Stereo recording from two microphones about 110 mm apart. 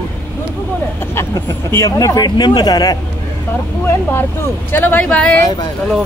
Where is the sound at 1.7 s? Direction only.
30° left (ahead or behind).